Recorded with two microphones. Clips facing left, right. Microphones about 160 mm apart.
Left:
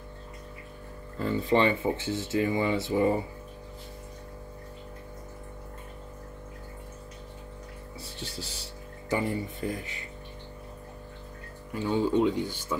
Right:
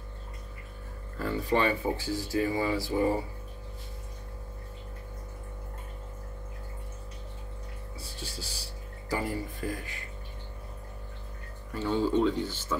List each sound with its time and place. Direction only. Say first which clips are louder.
1.2 s speech: left 3 dB; 20° left (ahead or behind)
8.0 s music: left 3 dB; 25° left (ahead or behind)
9.1 s speech: left 3 dB; 20° left (ahead or behind)
11.7 s speech: left 1 dB; 15° left (ahead or behind)